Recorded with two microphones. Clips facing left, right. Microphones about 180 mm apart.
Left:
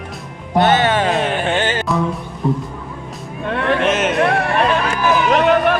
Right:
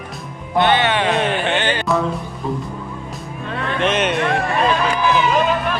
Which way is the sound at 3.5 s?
65° left (ahead or behind).